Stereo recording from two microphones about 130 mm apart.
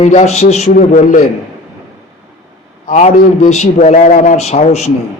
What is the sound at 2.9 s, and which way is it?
A man's voice, 65° left (ahead or behind).